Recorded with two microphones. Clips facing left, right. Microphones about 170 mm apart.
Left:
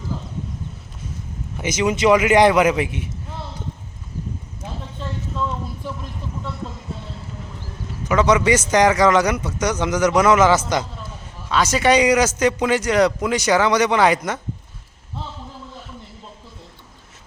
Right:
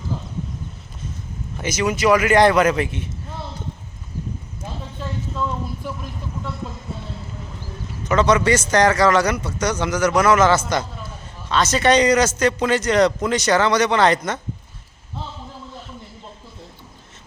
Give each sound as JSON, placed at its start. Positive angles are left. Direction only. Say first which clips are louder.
{"t": 1.5, "sound": "a man's voice", "louder": "left 1 dB", "side_deg": 20}
{"t": 4.9, "sound": "vehicle", "louder": "even", "side_deg": -5}
{"t": 8.0, "sound": "a man's voice", "louder": "even", "side_deg": 10}